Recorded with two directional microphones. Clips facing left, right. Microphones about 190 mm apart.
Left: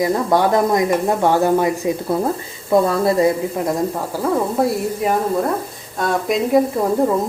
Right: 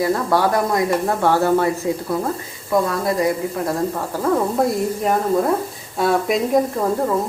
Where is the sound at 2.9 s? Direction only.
25° left (ahead or behind).